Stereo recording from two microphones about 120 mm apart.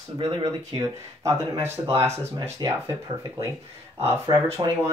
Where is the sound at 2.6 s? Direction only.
40° right (ahead or behind).